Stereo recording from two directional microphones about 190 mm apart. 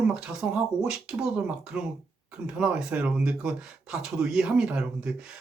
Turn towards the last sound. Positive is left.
turn(degrees=-5)  # may be behind; listen again after turning